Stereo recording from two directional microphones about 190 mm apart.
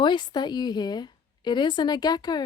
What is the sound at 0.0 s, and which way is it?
Speech, 25° left (ahead or behind).